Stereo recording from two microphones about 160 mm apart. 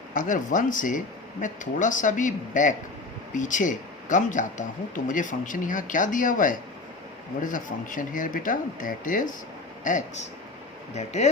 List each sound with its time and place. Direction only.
0.1 s speech: 55° left (ahead or behind)